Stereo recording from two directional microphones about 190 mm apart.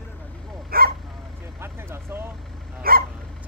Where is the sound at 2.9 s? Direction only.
50° right (ahead or behind).